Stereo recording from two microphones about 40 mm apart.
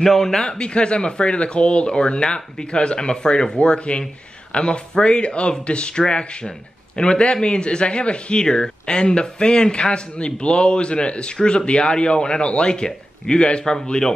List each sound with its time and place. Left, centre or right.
0.0 s a man's voice: centre
0.6 s speech: left